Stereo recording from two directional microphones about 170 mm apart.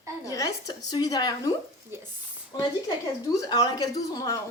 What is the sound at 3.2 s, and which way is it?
Speech, 25° left (ahead or behind).